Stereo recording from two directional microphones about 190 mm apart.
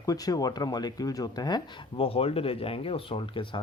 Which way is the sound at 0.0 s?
20° left (ahead or behind).